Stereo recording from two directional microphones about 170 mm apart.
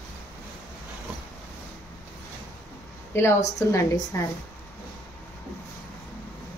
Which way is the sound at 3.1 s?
15° left (ahead or behind).